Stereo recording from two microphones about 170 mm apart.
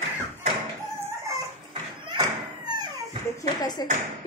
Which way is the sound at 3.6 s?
25° left (ahead or behind).